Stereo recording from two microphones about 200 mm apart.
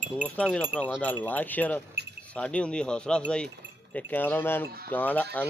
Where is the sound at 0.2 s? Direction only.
5° left (ahead or behind).